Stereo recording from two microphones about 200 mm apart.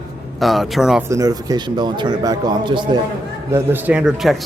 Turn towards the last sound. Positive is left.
turn(degrees=0)  # may be behind; listen again after turning